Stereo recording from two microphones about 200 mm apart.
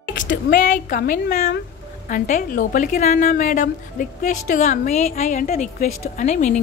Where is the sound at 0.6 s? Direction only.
40° left (ahead or behind).